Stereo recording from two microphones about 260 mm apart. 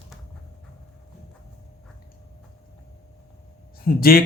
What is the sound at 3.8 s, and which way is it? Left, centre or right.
Speech, left.